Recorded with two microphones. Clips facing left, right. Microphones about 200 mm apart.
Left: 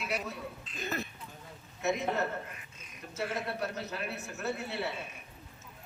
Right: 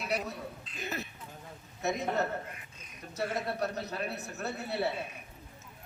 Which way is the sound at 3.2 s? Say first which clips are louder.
Right 2 dB; 35° right (ahead or behind).